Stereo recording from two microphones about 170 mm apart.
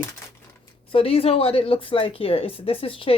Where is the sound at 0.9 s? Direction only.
35° left (ahead or behind).